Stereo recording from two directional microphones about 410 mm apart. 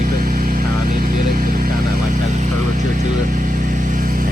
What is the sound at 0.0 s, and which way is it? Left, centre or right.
Vehicle, right.